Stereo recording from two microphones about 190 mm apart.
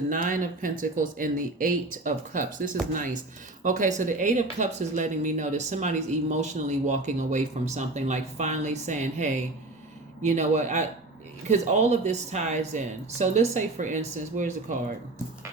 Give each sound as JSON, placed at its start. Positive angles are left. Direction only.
{"t": 0.1, "sound": "speech", "side_deg": -45}